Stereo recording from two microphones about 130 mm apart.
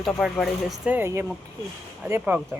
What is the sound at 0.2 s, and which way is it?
Speech, centre (ahead or behind).